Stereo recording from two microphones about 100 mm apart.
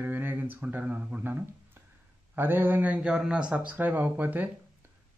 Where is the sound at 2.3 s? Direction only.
20° right (ahead or behind).